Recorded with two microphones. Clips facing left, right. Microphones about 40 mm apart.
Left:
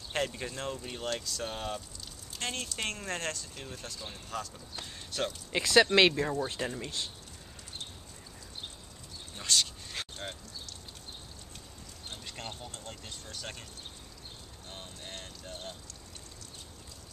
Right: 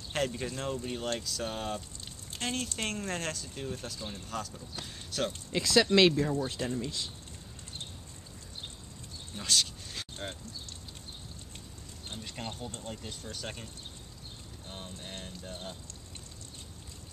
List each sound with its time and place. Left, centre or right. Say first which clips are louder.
0.1 s speech: right 1 dB; centre
5.5 s speech: left 2 dB; left
9.3 s speech: even; centre
10.0 s a sound: left 3 dB; centre
12.2 s speech: right 4 dB; centre
14.7 s speech: right 1 dB; centre